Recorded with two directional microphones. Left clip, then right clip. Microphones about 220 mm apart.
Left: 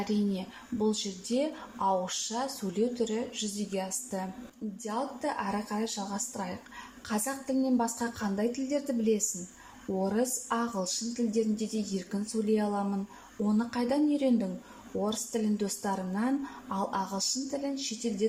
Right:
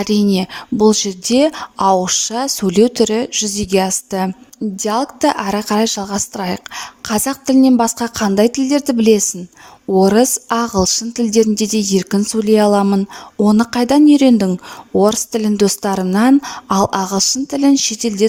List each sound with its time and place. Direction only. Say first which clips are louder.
0.0 s speech: right 17 dB; 45° right (ahead or behind)